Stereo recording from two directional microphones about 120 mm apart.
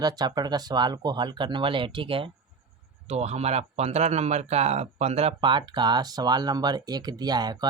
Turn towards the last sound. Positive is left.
turn(degrees=-35)  # may be behind; listen again after turning